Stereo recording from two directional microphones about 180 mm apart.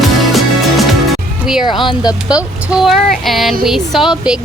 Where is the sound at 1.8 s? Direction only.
20° left (ahead or behind).